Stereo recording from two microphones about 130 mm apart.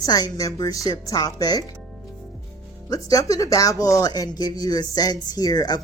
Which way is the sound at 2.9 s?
25° left (ahead or behind).